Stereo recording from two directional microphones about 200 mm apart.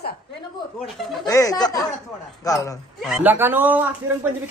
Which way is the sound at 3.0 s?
10° right (ahead or behind).